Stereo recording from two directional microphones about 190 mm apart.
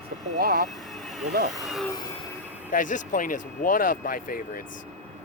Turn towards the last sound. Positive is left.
turn(degrees=50)  # may be behind; listen again after turning